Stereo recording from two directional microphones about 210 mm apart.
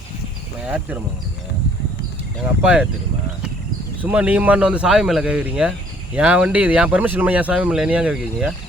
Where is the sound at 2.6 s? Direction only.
5° right (ahead or behind).